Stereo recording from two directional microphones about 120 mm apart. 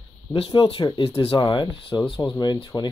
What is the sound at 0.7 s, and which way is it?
Speech, 45° left (ahead or behind).